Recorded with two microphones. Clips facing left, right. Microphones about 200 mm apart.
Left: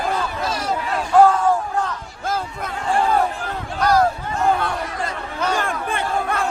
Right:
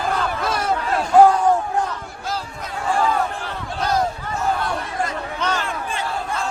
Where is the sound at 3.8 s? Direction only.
20° right (ahead or behind).